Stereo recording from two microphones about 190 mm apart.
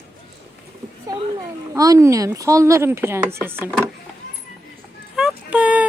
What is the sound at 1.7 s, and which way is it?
Speech, 15° right (ahead or behind).